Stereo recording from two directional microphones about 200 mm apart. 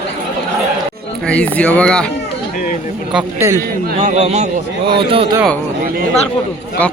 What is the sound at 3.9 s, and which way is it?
A man's voice, 35° right (ahead or behind).